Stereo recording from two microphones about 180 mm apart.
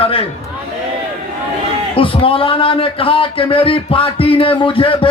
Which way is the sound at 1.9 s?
30° left (ahead or behind).